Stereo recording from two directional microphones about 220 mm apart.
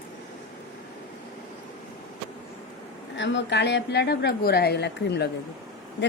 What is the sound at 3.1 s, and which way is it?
A woman's voice, 55° left (ahead or behind).